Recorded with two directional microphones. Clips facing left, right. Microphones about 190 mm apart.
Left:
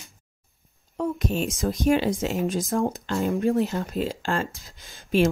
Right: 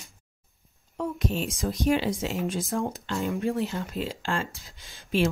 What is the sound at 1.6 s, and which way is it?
Speech, 50° left (ahead or behind).